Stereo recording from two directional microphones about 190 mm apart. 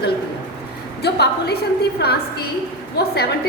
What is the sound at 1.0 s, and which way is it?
A woman's voice, 60° left (ahead or behind).